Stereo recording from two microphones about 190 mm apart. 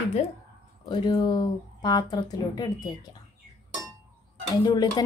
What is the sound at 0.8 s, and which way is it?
Speech, 20° left (ahead or behind).